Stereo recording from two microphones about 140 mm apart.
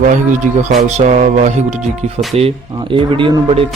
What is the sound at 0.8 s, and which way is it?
Music, 55° right (ahead or behind).